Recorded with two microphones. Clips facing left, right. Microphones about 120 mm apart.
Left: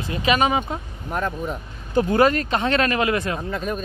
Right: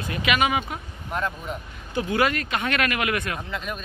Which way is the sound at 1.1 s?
40° left (ahead or behind).